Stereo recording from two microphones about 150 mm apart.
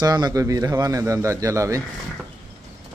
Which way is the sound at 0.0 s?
25° right (ahead or behind).